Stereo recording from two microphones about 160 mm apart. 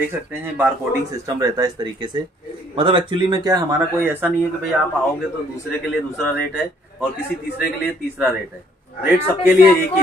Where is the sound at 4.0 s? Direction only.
15° right (ahead or behind).